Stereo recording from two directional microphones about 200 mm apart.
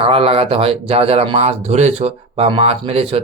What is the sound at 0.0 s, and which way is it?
Speech, 30° right (ahead or behind).